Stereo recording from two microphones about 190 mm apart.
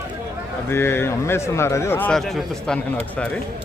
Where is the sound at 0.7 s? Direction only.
10° left (ahead or behind).